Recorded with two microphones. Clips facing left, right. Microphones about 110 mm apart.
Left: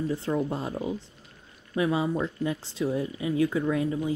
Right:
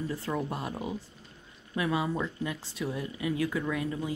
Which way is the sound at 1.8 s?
25° left (ahead or behind).